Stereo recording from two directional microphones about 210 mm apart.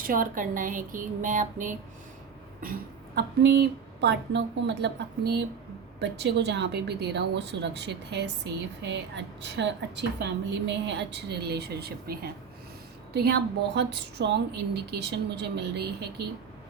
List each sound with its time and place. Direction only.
0.0 s speech: 40° right (ahead or behind)
3.2 s a woman's voice: 50° right (ahead or behind)